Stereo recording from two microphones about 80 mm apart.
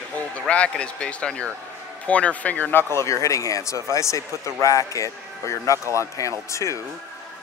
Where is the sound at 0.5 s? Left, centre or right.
Centre.